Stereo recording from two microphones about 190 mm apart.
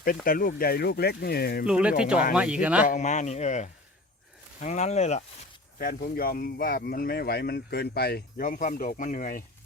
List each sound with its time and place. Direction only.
0.0 s speech: 50° left (ahead or behind)
1.6 s speech: 5° right (ahead or behind)
2.8 s speech: 40° left (ahead or behind)
5.8 s speech: 50° left (ahead or behind)